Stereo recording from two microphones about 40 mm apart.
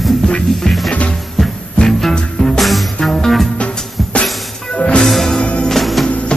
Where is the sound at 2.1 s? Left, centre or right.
Centre.